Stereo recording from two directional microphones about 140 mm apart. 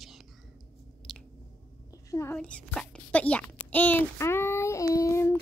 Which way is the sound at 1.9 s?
25° left (ahead or behind).